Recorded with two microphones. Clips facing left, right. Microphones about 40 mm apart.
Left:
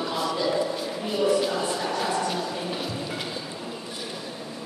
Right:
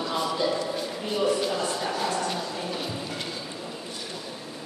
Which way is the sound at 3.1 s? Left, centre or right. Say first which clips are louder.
Left 2 dB; centre.